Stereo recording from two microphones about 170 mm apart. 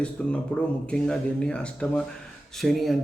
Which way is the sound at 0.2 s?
5° left (ahead or behind).